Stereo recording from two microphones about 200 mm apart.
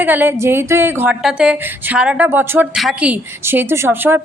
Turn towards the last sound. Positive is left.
turn(degrees=-10)  # may be behind; listen again after turning